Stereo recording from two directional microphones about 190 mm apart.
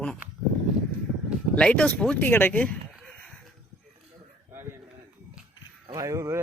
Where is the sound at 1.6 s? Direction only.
5° left (ahead or behind).